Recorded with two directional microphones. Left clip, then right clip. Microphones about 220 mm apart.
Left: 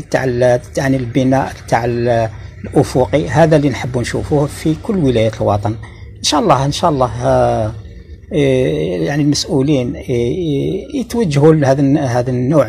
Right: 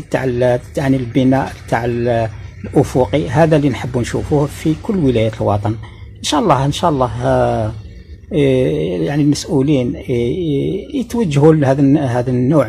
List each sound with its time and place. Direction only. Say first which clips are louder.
0.1 s speech: left 2 dB; 20° right (ahead or behind)
10.4 s mantra: even; 10° left (ahead or behind)
11.1 s speech: left 1 dB; 20° right (ahead or behind)